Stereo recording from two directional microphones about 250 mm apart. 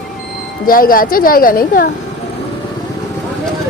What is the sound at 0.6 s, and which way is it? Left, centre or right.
A woman's voice, left.